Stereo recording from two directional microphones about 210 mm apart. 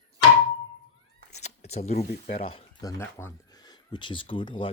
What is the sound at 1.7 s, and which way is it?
Speech, 30° left (ahead or behind).